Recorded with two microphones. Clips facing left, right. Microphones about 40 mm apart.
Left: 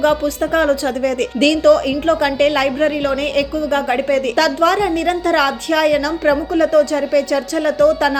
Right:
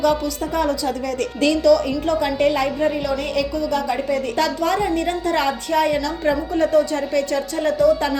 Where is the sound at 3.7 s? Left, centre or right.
Left.